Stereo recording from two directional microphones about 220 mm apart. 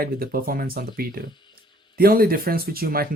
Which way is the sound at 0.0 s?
40° right (ahead or behind).